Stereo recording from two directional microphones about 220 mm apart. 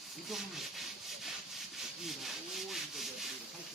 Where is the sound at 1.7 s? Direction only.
Centre (ahead or behind).